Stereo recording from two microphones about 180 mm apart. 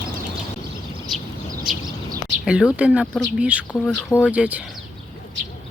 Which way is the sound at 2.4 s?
5° right (ahead or behind).